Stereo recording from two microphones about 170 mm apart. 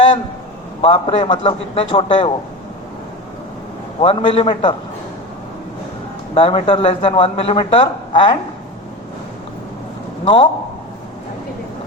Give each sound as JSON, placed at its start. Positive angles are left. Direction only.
{"t": 0.8, "sound": "speech", "side_deg": 30}
{"t": 4.0, "sound": "speech", "side_deg": 30}
{"t": 6.3, "sound": "speech", "side_deg": 35}
{"t": 10.2, "sound": "speech", "side_deg": 30}